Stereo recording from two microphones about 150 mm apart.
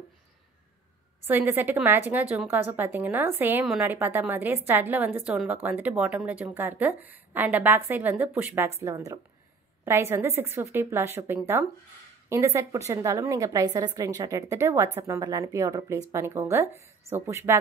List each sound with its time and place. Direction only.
1.2 s a woman's voice: 15° right (ahead or behind)